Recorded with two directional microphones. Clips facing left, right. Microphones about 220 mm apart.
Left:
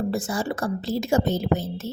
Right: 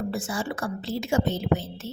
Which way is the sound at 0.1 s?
40° left (ahead or behind).